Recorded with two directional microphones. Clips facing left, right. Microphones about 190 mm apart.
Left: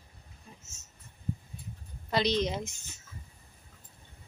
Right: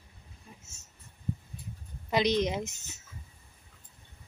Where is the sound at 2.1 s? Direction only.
15° right (ahead or behind).